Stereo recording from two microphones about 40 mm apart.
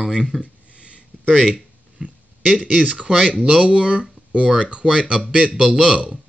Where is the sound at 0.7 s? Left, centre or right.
Right.